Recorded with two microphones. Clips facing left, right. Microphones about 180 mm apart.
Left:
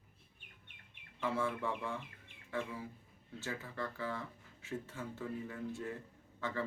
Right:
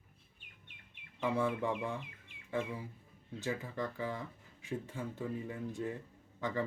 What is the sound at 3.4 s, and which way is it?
Speech, 15° right (ahead or behind).